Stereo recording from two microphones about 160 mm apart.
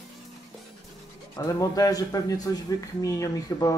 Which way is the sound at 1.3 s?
20° left (ahead or behind).